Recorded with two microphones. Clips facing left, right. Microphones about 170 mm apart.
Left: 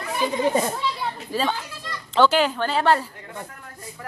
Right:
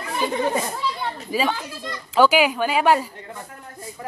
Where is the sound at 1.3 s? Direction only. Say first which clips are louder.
Right 2 dB; 10° right (ahead or behind).